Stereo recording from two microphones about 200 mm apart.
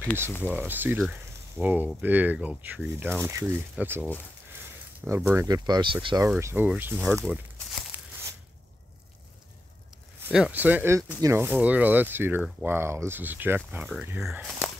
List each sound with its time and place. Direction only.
0.5 s speech: 10° right (ahead or behind)
6.2 s speech: 5° right (ahead or behind)
7.7 s a sound: 10° right (ahead or behind)
10.2 s speech: 5° right (ahead or behind)